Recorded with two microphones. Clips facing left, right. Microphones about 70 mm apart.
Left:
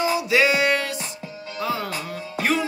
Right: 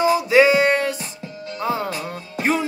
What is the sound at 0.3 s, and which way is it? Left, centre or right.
Music, right.